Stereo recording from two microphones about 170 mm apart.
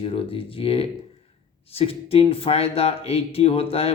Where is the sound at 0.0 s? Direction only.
35° left (ahead or behind).